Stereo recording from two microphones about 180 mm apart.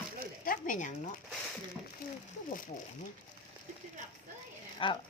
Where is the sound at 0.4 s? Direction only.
50° left (ahead or behind).